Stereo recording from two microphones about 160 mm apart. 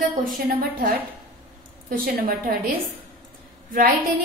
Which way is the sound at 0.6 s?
65° right (ahead or behind).